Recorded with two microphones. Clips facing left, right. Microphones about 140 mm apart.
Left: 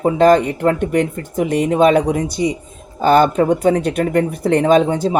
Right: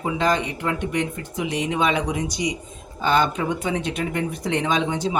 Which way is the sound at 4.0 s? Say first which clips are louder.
Left 9 dB; 55° left (ahead or behind).